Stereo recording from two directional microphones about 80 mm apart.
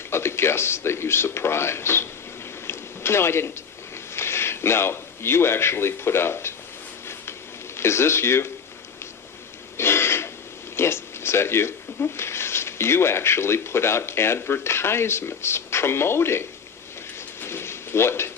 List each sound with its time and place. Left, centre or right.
0.1 s speech: left
2.6 s a sound: left
4.1 s speech: left
7.8 s speech: left
9.7 s throat clearing: left
10.8 s speech: left
17.4 s a sound: left